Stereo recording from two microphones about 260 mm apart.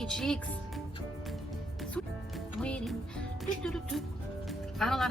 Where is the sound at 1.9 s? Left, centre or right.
Centre.